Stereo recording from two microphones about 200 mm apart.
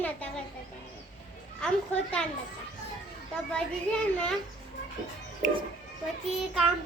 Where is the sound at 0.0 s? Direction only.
5° left (ahead or behind).